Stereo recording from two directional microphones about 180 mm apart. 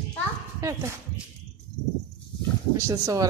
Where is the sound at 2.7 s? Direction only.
20° right (ahead or behind).